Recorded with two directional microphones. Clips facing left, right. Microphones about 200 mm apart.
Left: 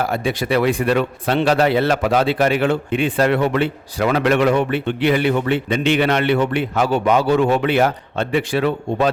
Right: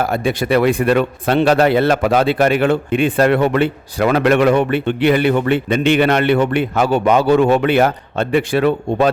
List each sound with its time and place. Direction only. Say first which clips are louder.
0.0 s a man's voice: right 3 dB; 50° right (ahead or behind)